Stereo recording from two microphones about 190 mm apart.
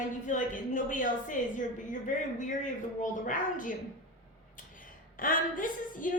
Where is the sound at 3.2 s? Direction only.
45° left (ahead or behind).